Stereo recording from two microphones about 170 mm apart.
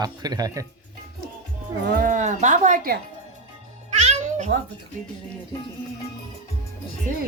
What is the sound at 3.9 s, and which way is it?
Music, 40° right (ahead or behind).